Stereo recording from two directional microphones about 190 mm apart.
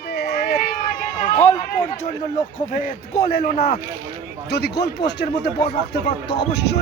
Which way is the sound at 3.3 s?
55° left (ahead or behind).